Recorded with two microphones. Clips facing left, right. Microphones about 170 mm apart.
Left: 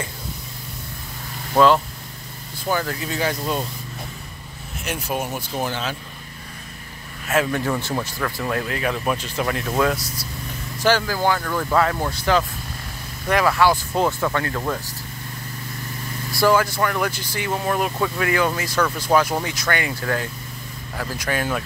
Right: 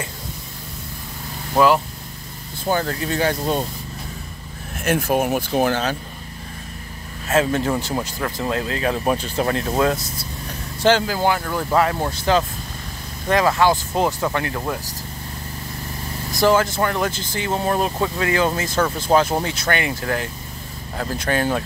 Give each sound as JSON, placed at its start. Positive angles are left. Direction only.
{"t": 1.5, "sound": "speech", "side_deg": -10}
{"t": 2.7, "sound": "speech", "side_deg": -35}
{"t": 4.7, "sound": "speech", "side_deg": -50}
{"t": 7.2, "sound": "speech", "side_deg": -25}
{"t": 9.9, "sound": "speech", "side_deg": -50}
{"t": 10.8, "sound": "speech", "side_deg": -20}
{"t": 16.3, "sound": "speech", "side_deg": -20}